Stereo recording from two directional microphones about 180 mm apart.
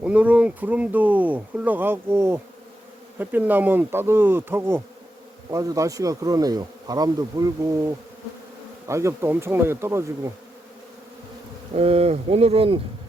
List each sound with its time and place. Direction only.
0.0 s speech: 10° right (ahead or behind)
11.7 s speech: 35° right (ahead or behind)